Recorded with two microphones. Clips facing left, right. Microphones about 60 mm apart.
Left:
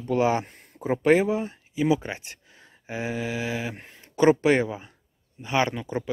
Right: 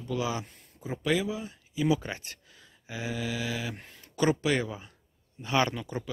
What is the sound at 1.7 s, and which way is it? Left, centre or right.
Speech, left.